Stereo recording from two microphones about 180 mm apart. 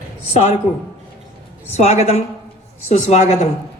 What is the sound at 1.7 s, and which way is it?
A woman's voice, 35° left (ahead or behind).